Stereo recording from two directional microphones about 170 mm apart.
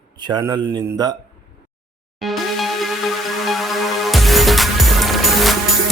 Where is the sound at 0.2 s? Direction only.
25° right (ahead or behind).